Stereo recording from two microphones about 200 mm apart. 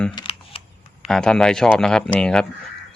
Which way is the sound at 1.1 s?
5° left (ahead or behind).